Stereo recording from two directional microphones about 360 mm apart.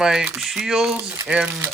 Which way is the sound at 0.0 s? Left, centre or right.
Centre.